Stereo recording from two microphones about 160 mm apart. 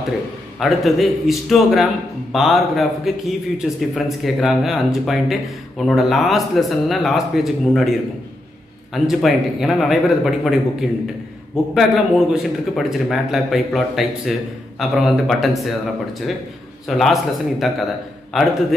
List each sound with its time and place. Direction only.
0.6 s a man's voice: centre (ahead or behind)
8.9 s a man's voice: centre (ahead or behind)